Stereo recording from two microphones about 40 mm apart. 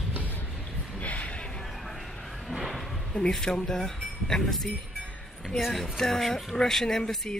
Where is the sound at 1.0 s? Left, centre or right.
Left.